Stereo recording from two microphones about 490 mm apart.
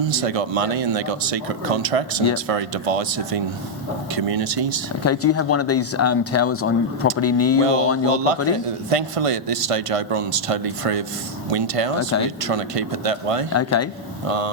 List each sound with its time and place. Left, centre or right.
0.0 s speech: right
5.0 s speech: left
7.6 s speech: right
13.5 s speech: left
14.3 s speech: right